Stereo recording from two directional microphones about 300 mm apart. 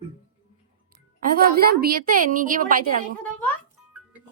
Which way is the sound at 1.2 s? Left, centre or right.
Right.